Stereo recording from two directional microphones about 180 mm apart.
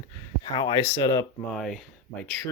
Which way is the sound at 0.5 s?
25° left (ahead or behind).